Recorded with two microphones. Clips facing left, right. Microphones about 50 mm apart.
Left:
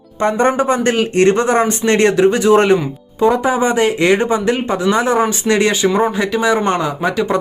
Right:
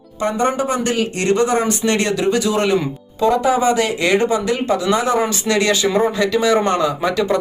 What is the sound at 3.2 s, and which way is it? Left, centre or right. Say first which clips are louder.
Speech: left 2 dB; left.